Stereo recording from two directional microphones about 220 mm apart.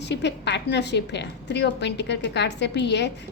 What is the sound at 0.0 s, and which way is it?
A woman's voice, 50° left (ahead or behind).